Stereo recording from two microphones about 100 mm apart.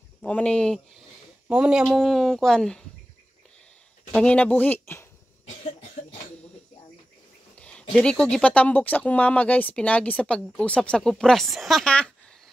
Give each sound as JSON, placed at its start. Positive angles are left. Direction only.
{"t": 0.2, "sound": "speech", "side_deg": 10}
{"t": 1.5, "sound": "speech", "side_deg": -10}
{"t": 4.1, "sound": "speech", "side_deg": 10}
{"t": 7.5, "sound": "speech", "side_deg": 10}